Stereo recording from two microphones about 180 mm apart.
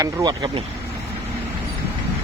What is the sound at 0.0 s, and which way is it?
Speech, 20° right (ahead or behind).